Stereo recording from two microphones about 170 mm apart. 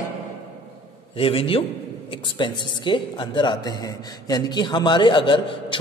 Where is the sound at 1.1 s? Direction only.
35° left (ahead or behind).